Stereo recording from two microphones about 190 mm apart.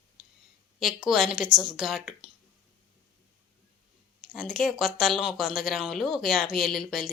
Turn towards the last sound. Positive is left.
turn(degrees=0)  # may be behind; listen again after turning